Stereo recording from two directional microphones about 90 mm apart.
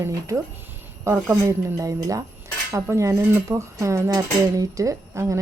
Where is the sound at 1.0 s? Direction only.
30° right (ahead or behind).